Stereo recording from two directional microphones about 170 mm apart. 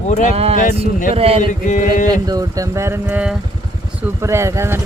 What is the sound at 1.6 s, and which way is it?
Mantra, 50° left (ahead or behind).